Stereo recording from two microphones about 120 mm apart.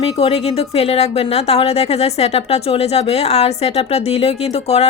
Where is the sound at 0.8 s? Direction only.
60° left (ahead or behind).